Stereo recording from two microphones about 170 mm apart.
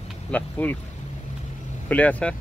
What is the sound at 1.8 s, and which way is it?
Speech, 10° left (ahead or behind).